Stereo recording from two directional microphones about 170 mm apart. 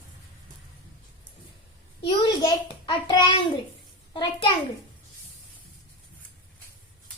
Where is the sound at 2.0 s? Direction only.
25° left (ahead or behind).